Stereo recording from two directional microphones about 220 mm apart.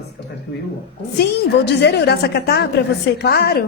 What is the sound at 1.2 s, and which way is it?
A woman's voice, 50° left (ahead or behind).